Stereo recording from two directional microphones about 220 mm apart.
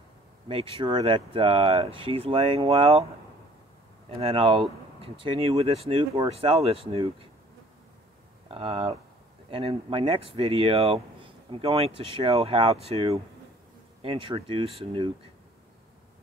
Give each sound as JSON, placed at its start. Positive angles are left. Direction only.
{"t": 0.5, "sound": "speech", "side_deg": -25}
{"t": 4.1, "sound": "speech", "side_deg": -25}
{"t": 8.5, "sound": "speech", "side_deg": -25}